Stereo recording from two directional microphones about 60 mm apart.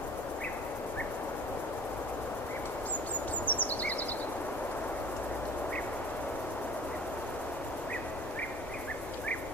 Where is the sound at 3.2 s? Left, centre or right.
Left.